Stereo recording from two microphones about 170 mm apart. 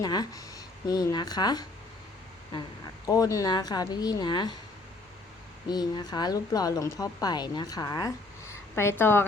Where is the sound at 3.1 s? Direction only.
20° left (ahead or behind).